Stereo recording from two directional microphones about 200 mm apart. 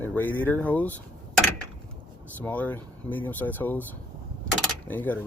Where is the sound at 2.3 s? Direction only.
10° left (ahead or behind).